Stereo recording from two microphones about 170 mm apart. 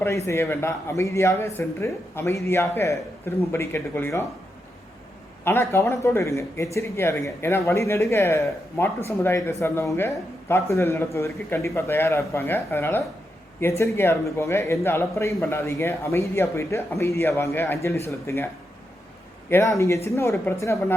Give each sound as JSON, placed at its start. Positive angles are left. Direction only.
{"t": 0.3, "sound": "speech", "side_deg": 15}
{"t": 5.5, "sound": "speech", "side_deg": 15}
{"t": 19.5, "sound": "speech", "side_deg": 15}